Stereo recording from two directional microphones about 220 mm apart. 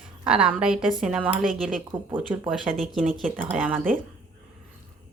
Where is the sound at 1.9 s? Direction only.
20° right (ahead or behind).